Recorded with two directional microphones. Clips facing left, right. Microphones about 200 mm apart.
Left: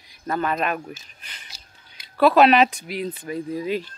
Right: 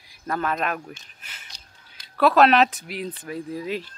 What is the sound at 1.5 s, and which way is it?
Speech, 5° left (ahead or behind).